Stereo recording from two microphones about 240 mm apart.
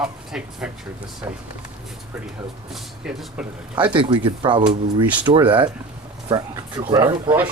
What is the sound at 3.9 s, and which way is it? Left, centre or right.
Speech, right.